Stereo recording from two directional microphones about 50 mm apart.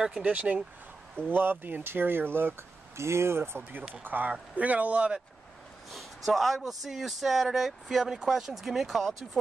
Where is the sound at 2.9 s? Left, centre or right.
Right.